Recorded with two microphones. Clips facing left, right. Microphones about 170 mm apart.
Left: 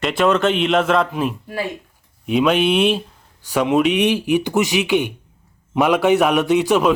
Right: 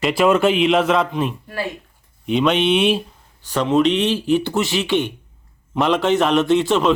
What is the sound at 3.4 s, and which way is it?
A man's voice, 10° left (ahead or behind).